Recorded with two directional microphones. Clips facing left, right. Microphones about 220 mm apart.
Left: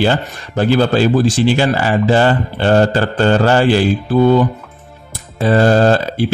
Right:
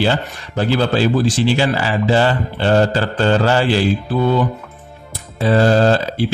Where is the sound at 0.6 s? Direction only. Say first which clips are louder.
Left 4 dB; 50° left (ahead or behind).